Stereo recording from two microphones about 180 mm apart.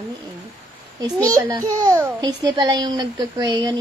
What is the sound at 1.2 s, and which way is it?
A child's voice, 20° right (ahead or behind).